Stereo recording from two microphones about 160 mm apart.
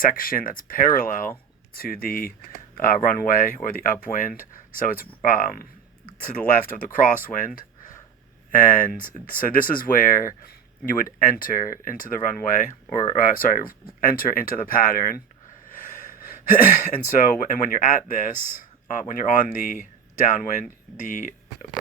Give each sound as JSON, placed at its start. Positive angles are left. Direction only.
{"t": 0.0, "sound": "speech", "side_deg": 60}
{"t": 6.8, "sound": "speech", "side_deg": 55}
{"t": 15.7, "sound": "snort", "side_deg": 55}
{"t": 16.9, "sound": "speech", "side_deg": 55}